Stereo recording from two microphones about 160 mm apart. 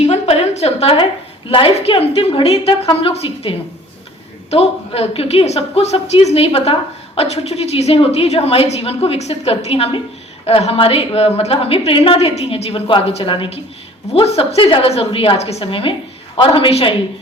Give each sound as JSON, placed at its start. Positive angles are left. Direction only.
{"t": 0.0, "sound": "a sound", "side_deg": 40}
{"t": 1.5, "sound": "a woman's voice", "side_deg": 35}
{"t": 4.5, "sound": "a woman's voice", "side_deg": 40}